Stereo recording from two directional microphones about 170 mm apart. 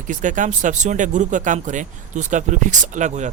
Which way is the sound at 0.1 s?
50° right (ahead or behind).